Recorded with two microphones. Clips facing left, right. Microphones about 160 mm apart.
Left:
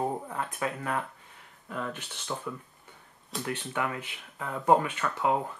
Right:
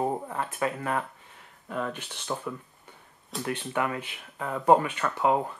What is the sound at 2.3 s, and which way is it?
Speech, 25° right (ahead or behind).